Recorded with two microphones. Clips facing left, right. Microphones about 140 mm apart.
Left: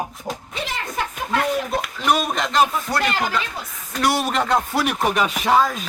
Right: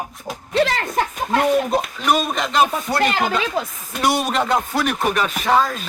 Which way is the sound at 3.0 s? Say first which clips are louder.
Right 3 dB; 20° right (ahead or behind).